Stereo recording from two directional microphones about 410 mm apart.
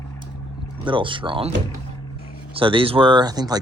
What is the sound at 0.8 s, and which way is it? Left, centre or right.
Speech, centre.